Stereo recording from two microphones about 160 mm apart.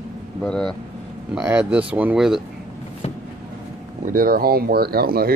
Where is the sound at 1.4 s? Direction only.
10° right (ahead or behind).